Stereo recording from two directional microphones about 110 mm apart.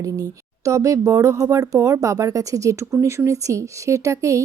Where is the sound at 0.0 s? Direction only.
30° right (ahead or behind).